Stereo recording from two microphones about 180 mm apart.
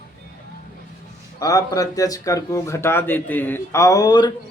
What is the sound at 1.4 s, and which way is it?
A man's voice, 20° left (ahead or behind).